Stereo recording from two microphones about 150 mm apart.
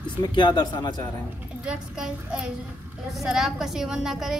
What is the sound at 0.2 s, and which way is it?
Speech, 30° left (ahead or behind).